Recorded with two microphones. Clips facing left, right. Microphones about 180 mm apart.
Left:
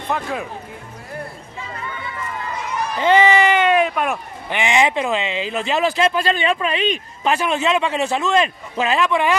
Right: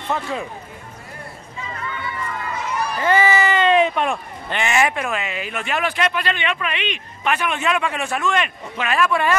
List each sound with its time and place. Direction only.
0.1 s speech: centre (ahead or behind)
3.0 s speech: 20° left (ahead or behind)